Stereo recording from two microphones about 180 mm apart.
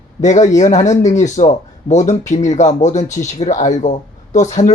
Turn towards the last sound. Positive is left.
turn(degrees=40)  # may be behind; listen again after turning